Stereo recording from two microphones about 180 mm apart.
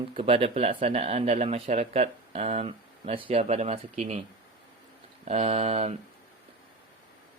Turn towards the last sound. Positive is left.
turn(degrees=-35)  # may be behind; listen again after turning